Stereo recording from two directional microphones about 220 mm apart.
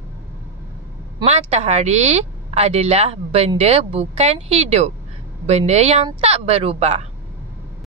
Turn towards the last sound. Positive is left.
turn(degrees=-30)  # may be behind; listen again after turning